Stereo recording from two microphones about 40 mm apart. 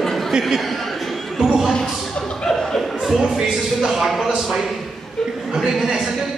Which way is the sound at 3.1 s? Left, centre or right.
Centre.